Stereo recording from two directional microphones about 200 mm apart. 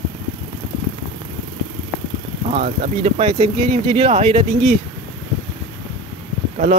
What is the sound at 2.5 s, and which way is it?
Speech, 35° right (ahead or behind).